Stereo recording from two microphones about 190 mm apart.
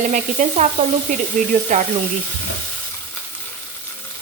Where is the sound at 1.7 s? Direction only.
45° right (ahead or behind).